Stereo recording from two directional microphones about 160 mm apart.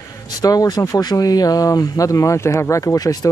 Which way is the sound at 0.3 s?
25° left (ahead or behind).